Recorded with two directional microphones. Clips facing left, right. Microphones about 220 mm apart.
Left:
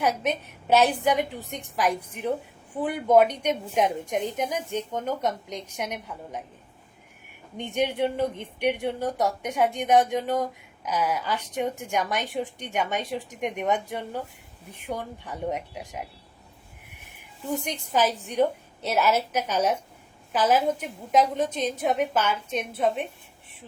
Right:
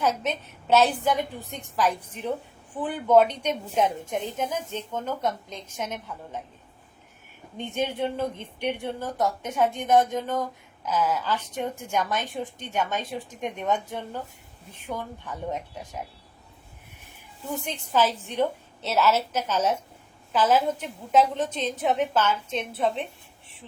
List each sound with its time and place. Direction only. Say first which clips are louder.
0.0 s a woman's voice: left 1 dB; 15° left (ahead or behind)
7.5 s a woman's voice: left 2 dB; 15° left (ahead or behind)
17.7 s a woman's voice: right 2 dB; 15° left (ahead or behind)